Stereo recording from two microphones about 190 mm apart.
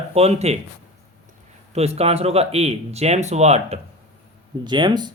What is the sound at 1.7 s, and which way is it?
Speech, 35° right (ahead or behind).